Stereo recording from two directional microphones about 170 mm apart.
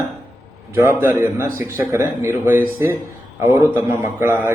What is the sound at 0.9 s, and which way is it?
A man's voice, 15° right (ahead or behind).